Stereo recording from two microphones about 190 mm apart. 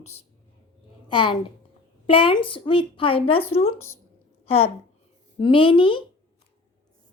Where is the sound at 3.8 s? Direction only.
15° left (ahead or behind).